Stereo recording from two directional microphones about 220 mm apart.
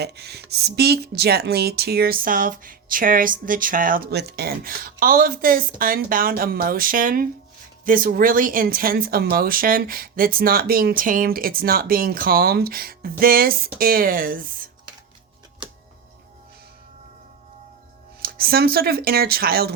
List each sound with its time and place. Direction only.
0.0 s speech: 50° right (ahead or behind)
18.2 s speech: 45° right (ahead or behind)